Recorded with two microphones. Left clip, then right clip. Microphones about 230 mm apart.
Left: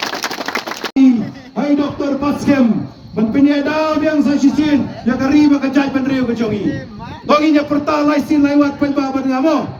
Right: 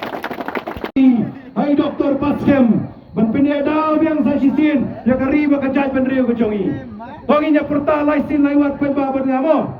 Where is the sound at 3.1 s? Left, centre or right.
Left.